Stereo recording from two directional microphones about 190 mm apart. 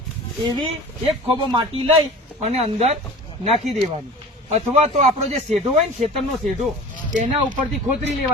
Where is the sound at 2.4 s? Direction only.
35° right (ahead or behind).